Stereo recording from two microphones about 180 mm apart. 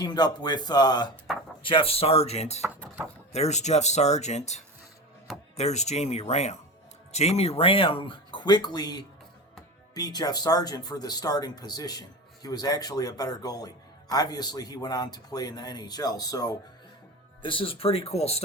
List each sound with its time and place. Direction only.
0.0 s speech: 25° left (ahead or behind)